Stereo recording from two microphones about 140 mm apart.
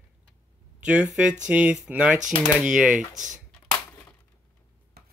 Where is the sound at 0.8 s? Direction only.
5° right (ahead or behind).